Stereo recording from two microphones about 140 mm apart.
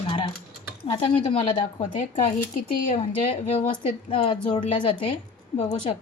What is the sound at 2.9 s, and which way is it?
Speech, 45° left (ahead or behind).